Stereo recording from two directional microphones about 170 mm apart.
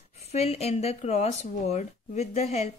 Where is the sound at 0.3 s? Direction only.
40° left (ahead or behind).